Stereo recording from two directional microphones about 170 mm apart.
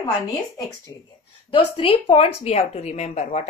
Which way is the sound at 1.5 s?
30° left (ahead or behind).